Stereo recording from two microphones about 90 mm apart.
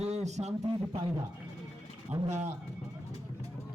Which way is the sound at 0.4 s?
45° right (ahead or behind).